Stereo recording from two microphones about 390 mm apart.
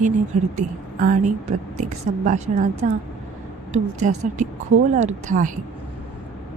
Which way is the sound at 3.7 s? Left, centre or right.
Centre.